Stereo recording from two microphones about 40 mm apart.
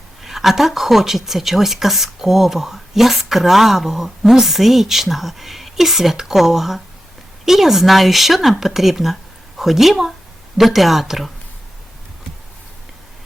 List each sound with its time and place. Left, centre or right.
0.2 s speech: centre